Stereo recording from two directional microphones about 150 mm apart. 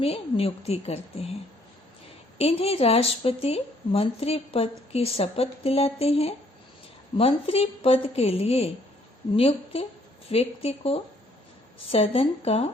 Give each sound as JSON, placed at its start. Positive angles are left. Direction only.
{"t": 0.0, "sound": "a woman's voice", "side_deg": 40}
{"t": 2.4, "sound": "a woman's voice", "side_deg": 40}